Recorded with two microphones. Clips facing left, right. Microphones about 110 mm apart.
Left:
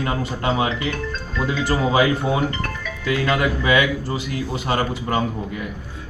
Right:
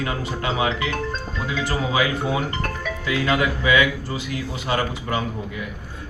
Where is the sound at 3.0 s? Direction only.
45° left (ahead or behind).